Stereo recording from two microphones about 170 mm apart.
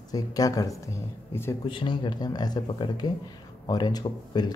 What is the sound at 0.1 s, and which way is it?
Speech, 20° left (ahead or behind).